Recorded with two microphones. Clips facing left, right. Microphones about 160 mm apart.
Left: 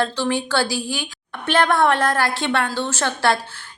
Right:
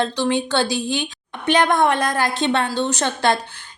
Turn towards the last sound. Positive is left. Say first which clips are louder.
# right 1 dB
turn(degrees=-20)  # may be behind; listen again after turning